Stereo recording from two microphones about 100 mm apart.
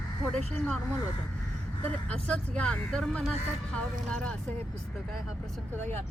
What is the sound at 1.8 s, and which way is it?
Speech, 10° left (ahead or behind).